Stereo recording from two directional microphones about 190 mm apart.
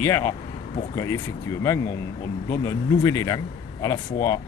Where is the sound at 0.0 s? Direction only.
15° left (ahead or behind).